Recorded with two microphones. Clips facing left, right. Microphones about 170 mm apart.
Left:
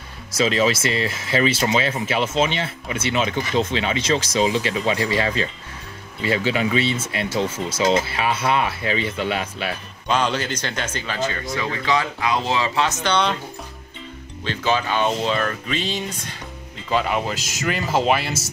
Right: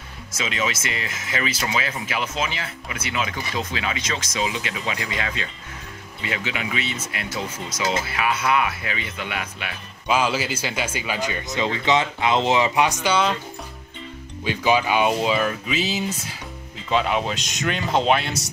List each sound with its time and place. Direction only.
0.3 s speech: 35° left (ahead or behind)
10.0 s speech: 5° right (ahead or behind)
14.4 s speech: 15° right (ahead or behind)